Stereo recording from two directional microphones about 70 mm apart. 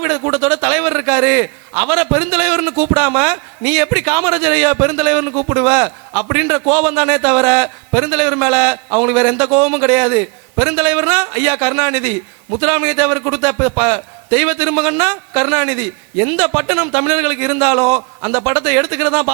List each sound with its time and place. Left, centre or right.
0.0 s a man's voice: right